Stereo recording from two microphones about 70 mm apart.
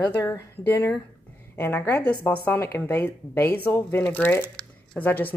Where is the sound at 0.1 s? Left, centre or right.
Left.